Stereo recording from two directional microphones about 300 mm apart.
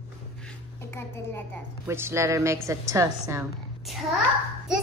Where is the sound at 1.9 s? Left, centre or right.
Centre.